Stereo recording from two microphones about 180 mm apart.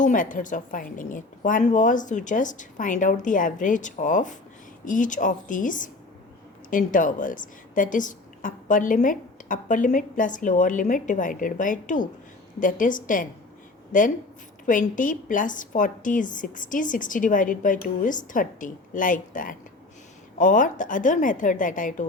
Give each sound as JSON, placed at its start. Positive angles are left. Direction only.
{"t": 0.0, "sound": "a woman's voice", "side_deg": 45}